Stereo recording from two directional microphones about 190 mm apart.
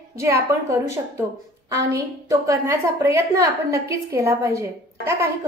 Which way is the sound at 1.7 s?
15° right (ahead or behind).